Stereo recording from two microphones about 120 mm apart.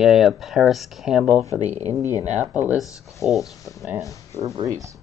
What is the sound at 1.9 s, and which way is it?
Speech, 45° right (ahead or behind).